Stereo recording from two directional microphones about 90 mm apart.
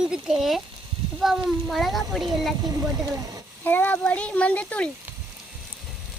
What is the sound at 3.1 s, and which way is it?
Speech, 40° right (ahead or behind).